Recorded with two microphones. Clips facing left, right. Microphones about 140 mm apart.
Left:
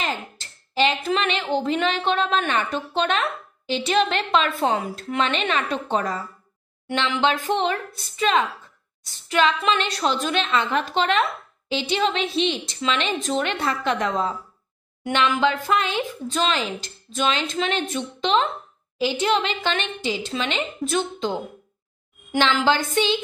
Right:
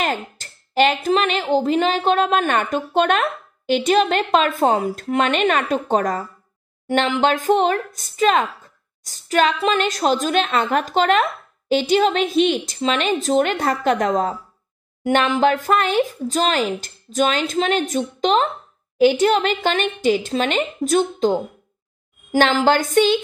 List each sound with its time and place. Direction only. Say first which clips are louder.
0.0 s a woman's voice: right 5 dB; 50° right (ahead or behind)
22.7 s speech: right 4 dB; 50° right (ahead or behind)